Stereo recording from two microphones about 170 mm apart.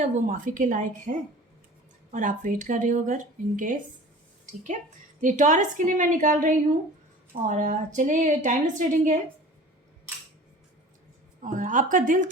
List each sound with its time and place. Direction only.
0.0 s a woman's voice: 50° right (ahead or behind)
2.1 s a woman's voice: 50° right (ahead or behind)
5.2 s a woman's voice: 45° right (ahead or behind)
11.4 s a woman's voice: 50° right (ahead or behind)